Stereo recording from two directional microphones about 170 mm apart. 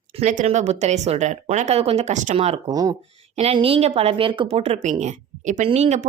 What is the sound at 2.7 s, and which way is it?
Speech, 20° right (ahead or behind).